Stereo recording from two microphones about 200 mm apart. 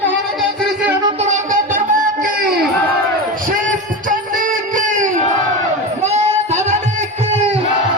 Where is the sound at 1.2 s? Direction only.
40° right (ahead or behind).